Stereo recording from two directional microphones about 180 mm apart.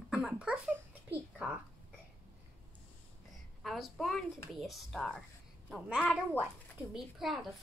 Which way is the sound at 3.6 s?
Centre (ahead or behind).